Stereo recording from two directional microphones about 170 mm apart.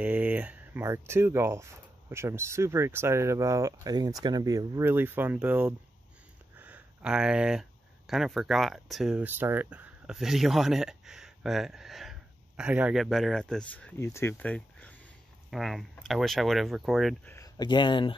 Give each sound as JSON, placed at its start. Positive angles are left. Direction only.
{"t": 0.0, "sound": "speech", "side_deg": -10}
{"t": 6.6, "sound": "a sound", "side_deg": -5}
{"t": 8.1, "sound": "speech", "side_deg": 0}
{"t": 17.6, "sound": "speech", "side_deg": 25}